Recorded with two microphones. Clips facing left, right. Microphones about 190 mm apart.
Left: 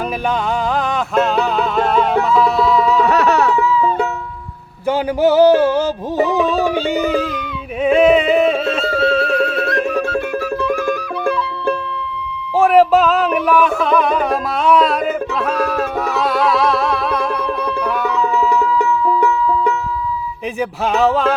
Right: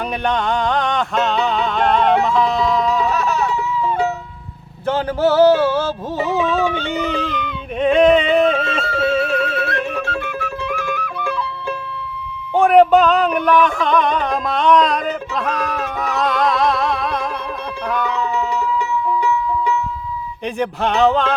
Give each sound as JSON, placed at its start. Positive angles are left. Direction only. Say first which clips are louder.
{"t": 0.7, "sound": "music", "louder": "left 1 dB", "side_deg": 5}
{"t": 3.0, "sound": "a sound", "louder": "left 5 dB", "side_deg": 70}
{"t": 4.9, "sound": "a sound", "louder": "left 2 dB", "side_deg": 15}
{"t": 7.2, "sound": "a sound", "louder": "left 2 dB", "side_deg": 5}
{"t": 9.1, "sound": "neigh", "louder": "left 2 dB", "side_deg": 0}
{"t": 9.6, "sound": "music", "louder": "left 4 dB", "side_deg": 50}
{"t": 12.5, "sound": "music", "louder": "even", "side_deg": 5}
{"t": 18.6, "sound": "music", "louder": "left 4 dB", "side_deg": 50}
{"t": 20.6, "sound": "music", "louder": "even", "side_deg": 5}